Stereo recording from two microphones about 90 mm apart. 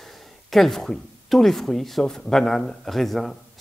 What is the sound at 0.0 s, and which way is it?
Speech, centre (ahead or behind).